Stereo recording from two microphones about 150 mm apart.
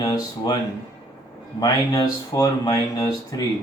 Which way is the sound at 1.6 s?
25° left (ahead or behind).